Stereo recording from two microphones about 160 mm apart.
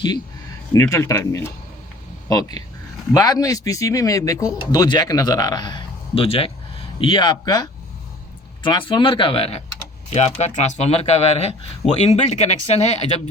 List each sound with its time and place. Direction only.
0.7 s speech: 20° left (ahead or behind)
3.2 s speech: 25° left (ahead or behind); by 13.2 s 45° left (ahead or behind)